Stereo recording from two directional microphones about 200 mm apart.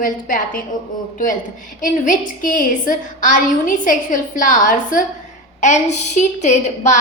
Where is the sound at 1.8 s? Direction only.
40° left (ahead or behind).